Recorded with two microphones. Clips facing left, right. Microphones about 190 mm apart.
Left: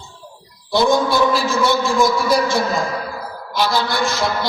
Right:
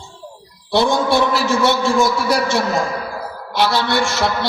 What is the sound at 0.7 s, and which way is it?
A man's voice, 75° right (ahead or behind).